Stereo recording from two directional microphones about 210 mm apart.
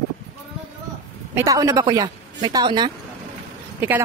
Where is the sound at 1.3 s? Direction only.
15° right (ahead or behind).